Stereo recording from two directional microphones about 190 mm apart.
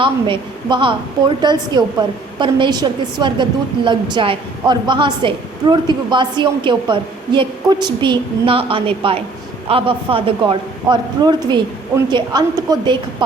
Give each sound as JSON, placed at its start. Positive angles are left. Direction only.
{"t": 0.0, "sound": "a woman's voice", "side_deg": -25}